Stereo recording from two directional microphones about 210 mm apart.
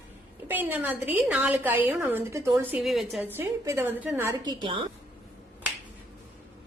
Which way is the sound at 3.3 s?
10° right (ahead or behind).